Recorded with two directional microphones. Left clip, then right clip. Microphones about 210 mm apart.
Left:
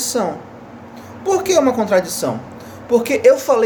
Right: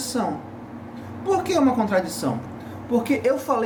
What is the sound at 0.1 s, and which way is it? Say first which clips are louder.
A woman's voice: left 4 dB; 40° left (ahead or behind).